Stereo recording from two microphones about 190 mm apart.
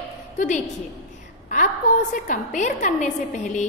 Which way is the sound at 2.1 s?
40° left (ahead or behind).